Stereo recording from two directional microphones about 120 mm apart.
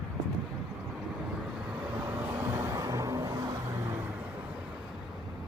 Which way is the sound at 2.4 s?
20° right (ahead or behind).